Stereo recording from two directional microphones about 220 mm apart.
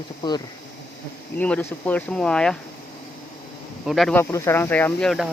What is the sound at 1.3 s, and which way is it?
Speech, 5° left (ahead or behind).